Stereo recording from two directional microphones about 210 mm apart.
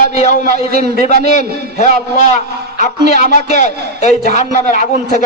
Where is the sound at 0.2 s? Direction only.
40° left (ahead or behind).